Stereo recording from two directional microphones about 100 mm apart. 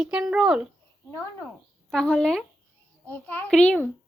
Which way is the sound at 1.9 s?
10° left (ahead or behind).